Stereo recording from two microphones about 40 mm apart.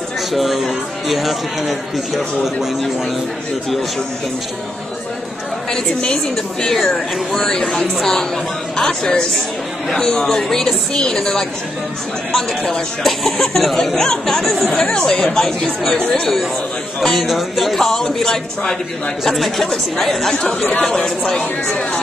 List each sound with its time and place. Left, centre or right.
0.3 s speech: centre
6.8 s speech: centre
14.8 s speech: centre
17.0 s speech: centre
19.2 s speech: centre